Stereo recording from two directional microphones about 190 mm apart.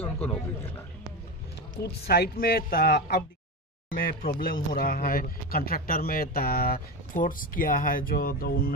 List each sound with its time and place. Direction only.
0.0 s a man's voice: 10° left (ahead or behind)
1.8 s speech: 60° left (ahead or behind)